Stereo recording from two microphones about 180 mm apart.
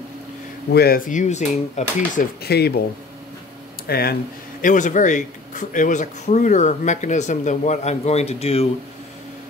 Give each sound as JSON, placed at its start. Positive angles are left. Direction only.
{"t": 0.7, "sound": "speech", "side_deg": 60}
{"t": 2.4, "sound": "speech", "side_deg": 60}
{"t": 3.8, "sound": "speech", "side_deg": 60}